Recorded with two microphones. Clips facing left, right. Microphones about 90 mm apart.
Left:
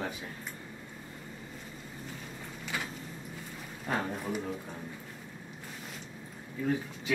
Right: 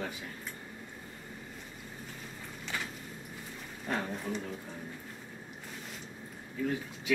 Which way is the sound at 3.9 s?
5° left (ahead or behind).